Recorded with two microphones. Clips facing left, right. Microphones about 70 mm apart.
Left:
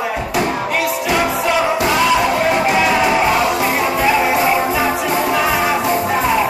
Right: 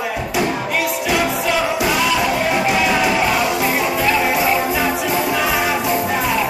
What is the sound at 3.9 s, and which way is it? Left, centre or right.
Music, centre.